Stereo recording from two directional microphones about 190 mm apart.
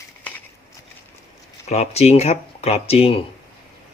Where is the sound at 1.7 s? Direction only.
35° left (ahead or behind).